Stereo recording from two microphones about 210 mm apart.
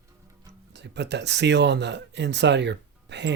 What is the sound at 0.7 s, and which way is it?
Speech, 55° right (ahead or behind).